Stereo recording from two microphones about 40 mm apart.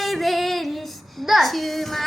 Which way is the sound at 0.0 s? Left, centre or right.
Centre.